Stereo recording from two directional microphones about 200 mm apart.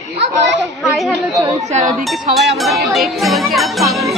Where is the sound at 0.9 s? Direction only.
Centre (ahead or behind).